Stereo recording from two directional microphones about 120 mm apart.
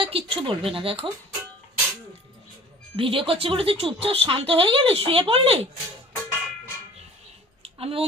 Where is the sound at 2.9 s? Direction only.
50° right (ahead or behind).